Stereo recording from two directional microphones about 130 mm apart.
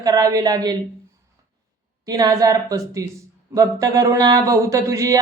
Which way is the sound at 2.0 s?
30° right (ahead or behind).